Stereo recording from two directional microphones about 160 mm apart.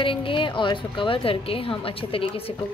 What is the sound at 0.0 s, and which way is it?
A woman's voice, 30° left (ahead or behind).